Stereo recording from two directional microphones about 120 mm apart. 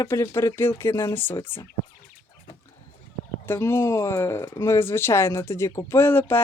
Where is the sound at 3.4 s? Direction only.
20° left (ahead or behind).